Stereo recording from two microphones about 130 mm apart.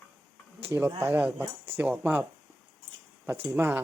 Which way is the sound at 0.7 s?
20° right (ahead or behind).